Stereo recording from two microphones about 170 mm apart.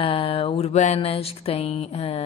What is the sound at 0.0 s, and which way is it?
A woman's voice, 35° left (ahead or behind).